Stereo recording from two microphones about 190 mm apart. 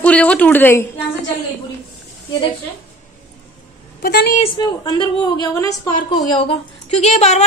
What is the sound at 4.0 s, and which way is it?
Speech, 55° left (ahead or behind).